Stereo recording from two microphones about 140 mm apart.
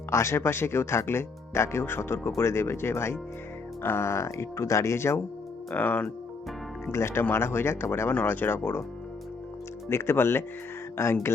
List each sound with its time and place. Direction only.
0.1 s speech: 20° left (ahead or behind)
9.9 s speech: 20° left (ahead or behind)